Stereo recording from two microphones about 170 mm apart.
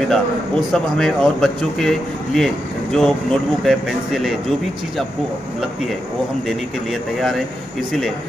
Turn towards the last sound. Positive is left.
turn(degrees=0)  # may be behind; listen again after turning